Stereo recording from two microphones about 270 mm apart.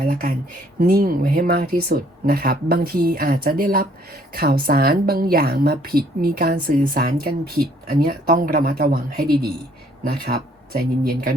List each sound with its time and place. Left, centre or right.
0.0 s speech: right